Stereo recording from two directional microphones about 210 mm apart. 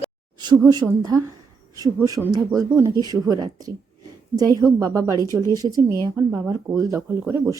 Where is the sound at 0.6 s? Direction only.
15° right (ahead or behind).